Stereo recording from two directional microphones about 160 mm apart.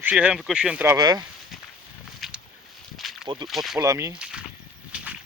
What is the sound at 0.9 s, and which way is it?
Speech, 25° right (ahead or behind).